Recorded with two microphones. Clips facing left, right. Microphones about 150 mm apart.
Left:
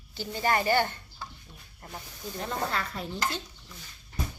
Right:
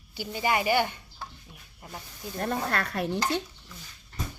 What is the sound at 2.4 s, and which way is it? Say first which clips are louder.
Stir: right 3 dB; 60° right (ahead or behind).